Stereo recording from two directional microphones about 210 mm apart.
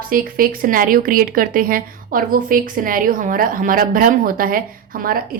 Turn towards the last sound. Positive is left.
turn(degrees=-45)  # may be behind; listen again after turning